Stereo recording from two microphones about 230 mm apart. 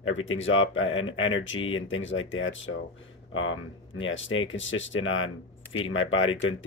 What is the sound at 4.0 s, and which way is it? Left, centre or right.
Speech, left.